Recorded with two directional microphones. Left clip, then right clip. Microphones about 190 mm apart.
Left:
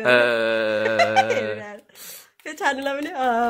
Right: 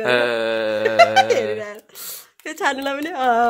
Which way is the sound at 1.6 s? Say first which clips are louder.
Right 5 dB; 40° right (ahead or behind).